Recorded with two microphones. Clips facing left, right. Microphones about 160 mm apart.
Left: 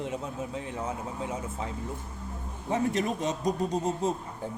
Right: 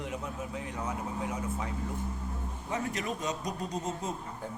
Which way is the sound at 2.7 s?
30° left (ahead or behind).